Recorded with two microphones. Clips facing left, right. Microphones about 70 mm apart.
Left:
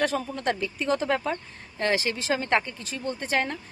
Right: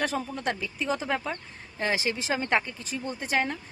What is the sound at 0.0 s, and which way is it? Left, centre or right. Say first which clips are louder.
A woman's voice: left 3 dB; centre.